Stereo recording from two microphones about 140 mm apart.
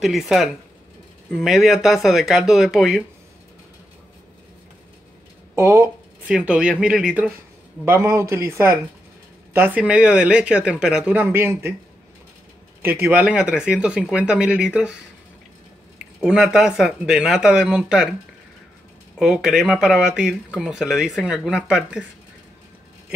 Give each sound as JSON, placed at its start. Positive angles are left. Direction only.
{"t": 0.0, "sound": "speech", "side_deg": 0}
{"t": 5.5, "sound": "speech", "side_deg": -20}
{"t": 7.8, "sound": "speech", "side_deg": -15}
{"t": 13.0, "sound": "speech", "side_deg": -10}
{"t": 16.2, "sound": "speech", "side_deg": -5}
{"t": 19.1, "sound": "speech", "side_deg": 0}